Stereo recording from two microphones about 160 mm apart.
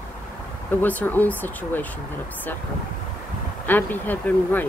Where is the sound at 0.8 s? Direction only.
10° left (ahead or behind).